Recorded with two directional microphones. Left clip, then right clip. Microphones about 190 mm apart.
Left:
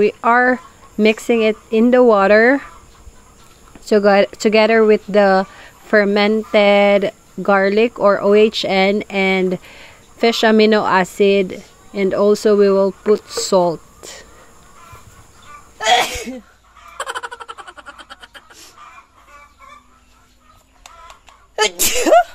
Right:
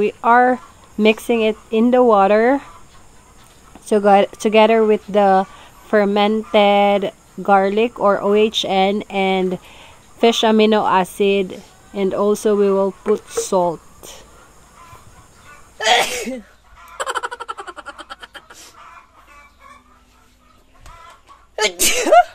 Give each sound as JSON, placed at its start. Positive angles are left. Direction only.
{"t": 0.0, "sound": "a woman's voice", "side_deg": 20}
{"t": 3.9, "sound": "a woman's voice", "side_deg": 15}
{"t": 15.8, "sound": "speech", "side_deg": -55}
{"t": 16.9, "sound": "a sound", "side_deg": 0}
{"t": 21.5, "sound": "a woman's voice", "side_deg": 25}